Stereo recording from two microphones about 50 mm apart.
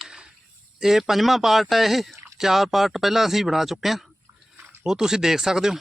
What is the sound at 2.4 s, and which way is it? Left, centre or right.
A man's voice, centre.